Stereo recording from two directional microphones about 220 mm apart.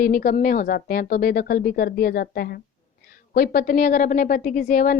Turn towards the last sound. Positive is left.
turn(degrees=40)  # may be behind; listen again after turning